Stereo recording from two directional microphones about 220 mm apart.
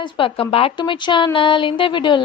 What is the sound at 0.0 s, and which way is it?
A woman's voice, 25° left (ahead or behind).